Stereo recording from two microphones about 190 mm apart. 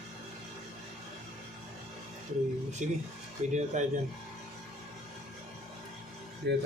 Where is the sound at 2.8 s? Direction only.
40° right (ahead or behind).